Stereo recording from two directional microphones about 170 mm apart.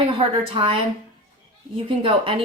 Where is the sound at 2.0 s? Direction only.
30° right (ahead or behind).